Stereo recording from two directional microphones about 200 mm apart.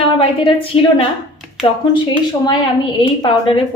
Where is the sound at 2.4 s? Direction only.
20° left (ahead or behind).